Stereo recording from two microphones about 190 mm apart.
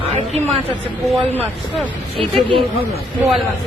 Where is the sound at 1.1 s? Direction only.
10° left (ahead or behind).